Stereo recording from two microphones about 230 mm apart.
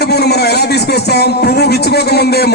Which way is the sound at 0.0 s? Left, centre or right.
Left.